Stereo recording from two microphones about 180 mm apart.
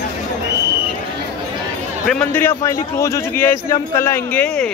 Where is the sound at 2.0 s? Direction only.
10° left (ahead or behind).